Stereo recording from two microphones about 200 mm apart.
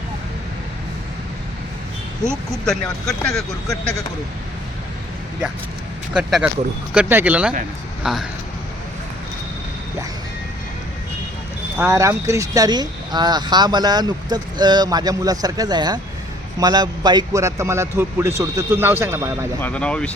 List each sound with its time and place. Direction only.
2.3 s speech: centre (ahead or behind)
6.1 s a man's voice: 5° right (ahead or behind)
11.8 s a man's voice: 15° right (ahead or behind)
19.5 s speech: 5° left (ahead or behind)